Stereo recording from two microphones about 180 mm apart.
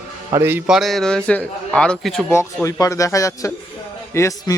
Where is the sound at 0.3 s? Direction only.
15° right (ahead or behind).